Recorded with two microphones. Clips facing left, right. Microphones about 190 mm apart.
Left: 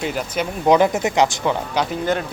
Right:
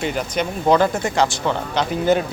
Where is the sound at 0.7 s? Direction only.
15° left (ahead or behind).